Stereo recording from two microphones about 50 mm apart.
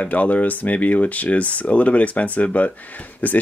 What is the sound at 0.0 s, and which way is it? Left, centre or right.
Speech, left.